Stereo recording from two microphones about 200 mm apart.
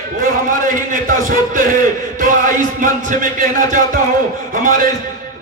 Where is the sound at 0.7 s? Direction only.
40° right (ahead or behind).